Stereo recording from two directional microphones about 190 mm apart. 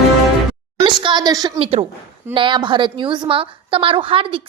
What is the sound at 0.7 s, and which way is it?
A woman's voice, 25° right (ahead or behind).